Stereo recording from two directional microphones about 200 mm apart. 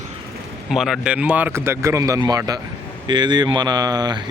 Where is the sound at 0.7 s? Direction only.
Centre (ahead or behind).